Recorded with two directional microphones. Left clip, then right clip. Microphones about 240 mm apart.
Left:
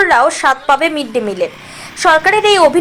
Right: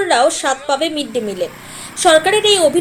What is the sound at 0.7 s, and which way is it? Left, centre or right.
Speech, left.